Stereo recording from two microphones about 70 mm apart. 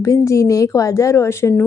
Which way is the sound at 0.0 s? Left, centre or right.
Left.